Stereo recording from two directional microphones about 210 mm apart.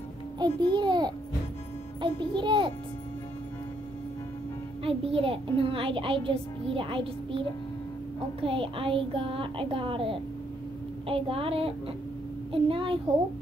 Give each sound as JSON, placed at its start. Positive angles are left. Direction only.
{"t": 0.4, "sound": "a child's voice", "side_deg": -20}
{"t": 4.8, "sound": "a child's voice", "side_deg": -25}